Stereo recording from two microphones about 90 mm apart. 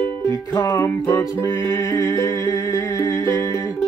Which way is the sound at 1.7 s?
45° left (ahead or behind).